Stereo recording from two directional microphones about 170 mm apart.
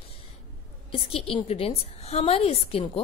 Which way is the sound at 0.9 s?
35° left (ahead or behind).